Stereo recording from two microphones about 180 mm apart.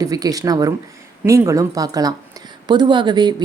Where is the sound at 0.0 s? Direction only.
20° right (ahead or behind).